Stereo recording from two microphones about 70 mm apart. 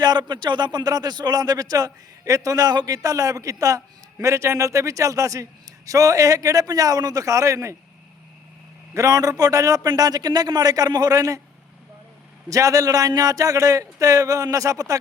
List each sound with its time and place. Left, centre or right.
0.0 s speech: right
9.0 s speech: right
9.8 s a man's voice: right
12.5 s speech: right